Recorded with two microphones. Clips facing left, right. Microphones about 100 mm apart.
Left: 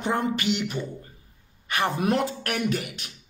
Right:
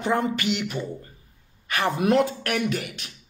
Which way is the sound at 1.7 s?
30° left (ahead or behind).